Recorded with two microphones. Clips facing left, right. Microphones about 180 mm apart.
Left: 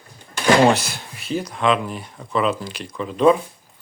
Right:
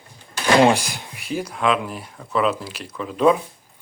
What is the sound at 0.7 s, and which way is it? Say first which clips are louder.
Speech: left 1 dB; 10° right (ahead or behind).